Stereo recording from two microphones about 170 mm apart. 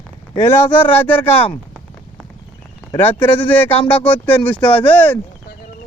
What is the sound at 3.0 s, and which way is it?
Speech, 10° left (ahead or behind).